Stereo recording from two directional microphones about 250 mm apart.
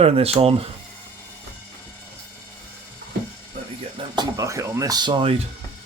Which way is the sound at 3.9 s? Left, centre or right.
Centre.